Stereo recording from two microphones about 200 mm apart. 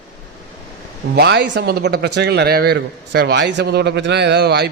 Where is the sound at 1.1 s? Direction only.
55° right (ahead or behind).